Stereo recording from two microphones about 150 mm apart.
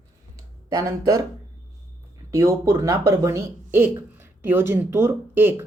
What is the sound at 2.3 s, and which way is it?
Speech, 20° right (ahead or behind).